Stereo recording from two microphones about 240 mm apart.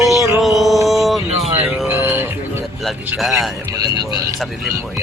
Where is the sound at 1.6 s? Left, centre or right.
Centre.